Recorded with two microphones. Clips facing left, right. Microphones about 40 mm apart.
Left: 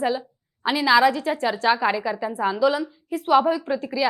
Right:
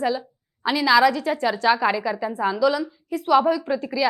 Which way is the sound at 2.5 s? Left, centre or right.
Centre.